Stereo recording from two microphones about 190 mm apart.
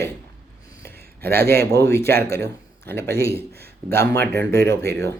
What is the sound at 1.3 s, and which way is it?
Speech, 55° right (ahead or behind).